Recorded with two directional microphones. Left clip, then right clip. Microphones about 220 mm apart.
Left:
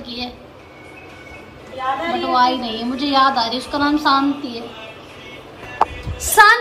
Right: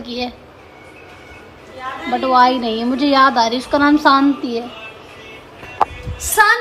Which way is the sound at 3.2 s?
25° left (ahead or behind).